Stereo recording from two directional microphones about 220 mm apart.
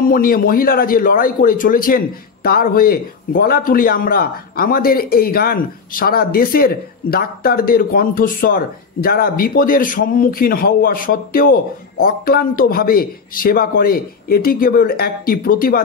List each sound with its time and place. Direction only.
0.1 s speech: 40° left (ahead or behind)